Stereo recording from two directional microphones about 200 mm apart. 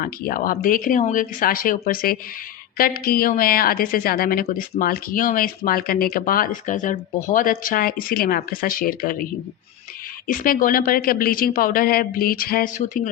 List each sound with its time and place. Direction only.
0.0 s speech: 45° left (ahead or behind)